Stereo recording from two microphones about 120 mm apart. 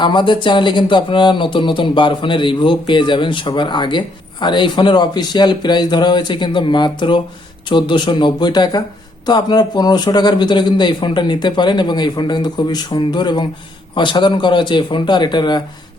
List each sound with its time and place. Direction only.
0.0 s speech: 40° left (ahead or behind)